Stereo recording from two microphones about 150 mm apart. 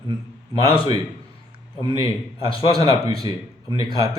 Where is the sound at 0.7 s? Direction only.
30° right (ahead or behind).